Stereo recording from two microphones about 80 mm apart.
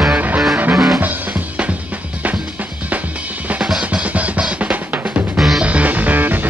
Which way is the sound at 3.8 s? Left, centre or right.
Centre.